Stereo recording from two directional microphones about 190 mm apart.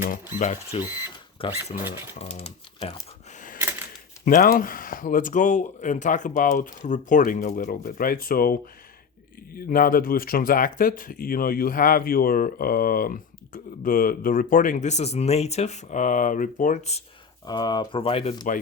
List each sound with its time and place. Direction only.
0.3 s speech: 40° left (ahead or behind)
0.9 s speech: 10° right (ahead or behind)
1.4 s speech: 30° left (ahead or behind)
3.6 s typewriter: 10° right (ahead or behind)
4.3 s speech: 45° left (ahead or behind)
9.6 s speech: 50° left (ahead or behind)
17.4 s speech: 20° left (ahead or behind)